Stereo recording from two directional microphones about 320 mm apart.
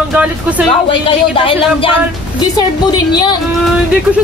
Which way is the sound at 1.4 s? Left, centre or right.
Centre.